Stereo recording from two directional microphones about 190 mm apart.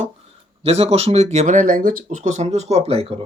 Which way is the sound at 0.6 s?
30° right (ahead or behind).